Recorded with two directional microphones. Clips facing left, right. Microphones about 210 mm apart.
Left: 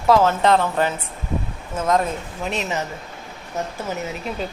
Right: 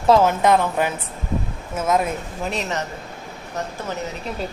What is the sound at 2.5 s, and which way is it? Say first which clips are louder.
Speech: left 1 dB; centre (ahead or behind).